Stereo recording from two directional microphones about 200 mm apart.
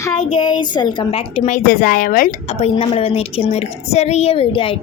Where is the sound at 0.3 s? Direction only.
20° left (ahead or behind).